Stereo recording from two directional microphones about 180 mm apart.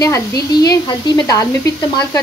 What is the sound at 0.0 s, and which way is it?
Speech, 20° left (ahead or behind).